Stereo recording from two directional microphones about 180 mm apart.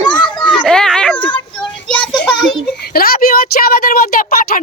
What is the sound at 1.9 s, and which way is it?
Child singing, 5° left (ahead or behind).